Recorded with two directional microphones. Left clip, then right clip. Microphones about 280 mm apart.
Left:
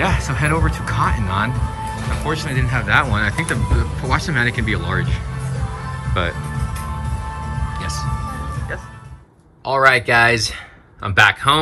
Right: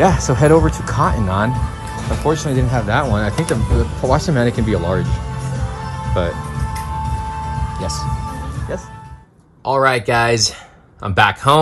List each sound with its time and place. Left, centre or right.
0.0 s speech: centre
7.8 s speech: centre
9.7 s speech: centre